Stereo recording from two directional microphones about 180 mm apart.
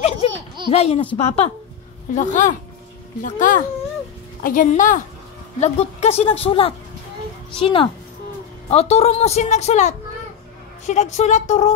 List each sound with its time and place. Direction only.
0.2 s baby laughter: 30° left (ahead or behind)
0.7 s a woman's voice: 35° left (ahead or behind)